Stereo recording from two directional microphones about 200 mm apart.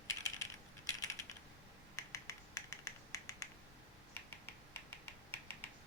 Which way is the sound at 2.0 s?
15° left (ahead or behind).